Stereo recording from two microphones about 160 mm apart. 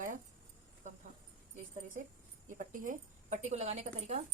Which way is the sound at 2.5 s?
55° right (ahead or behind).